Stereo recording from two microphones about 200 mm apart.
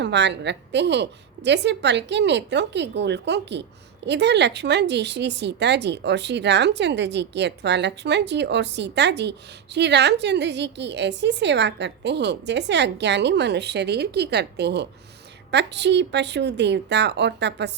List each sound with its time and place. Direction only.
0.0 s speech: 60° right (ahead or behind)